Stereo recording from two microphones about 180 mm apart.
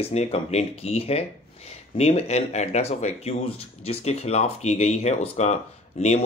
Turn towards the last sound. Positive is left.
turn(degrees=40)  # may be behind; listen again after turning